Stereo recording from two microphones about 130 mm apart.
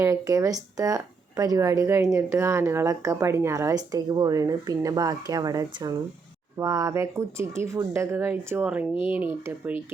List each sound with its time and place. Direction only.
0.0 s speech: 25° right (ahead or behind)